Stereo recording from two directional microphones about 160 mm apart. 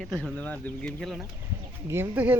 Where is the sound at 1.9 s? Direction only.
10° right (ahead or behind).